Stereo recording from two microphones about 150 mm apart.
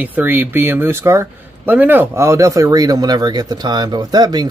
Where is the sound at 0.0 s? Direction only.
10° right (ahead or behind).